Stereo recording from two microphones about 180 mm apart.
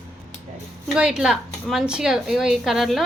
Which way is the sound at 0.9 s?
5° right (ahead or behind).